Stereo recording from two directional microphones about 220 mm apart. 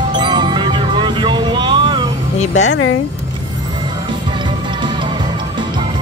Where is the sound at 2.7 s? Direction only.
70° left (ahead or behind).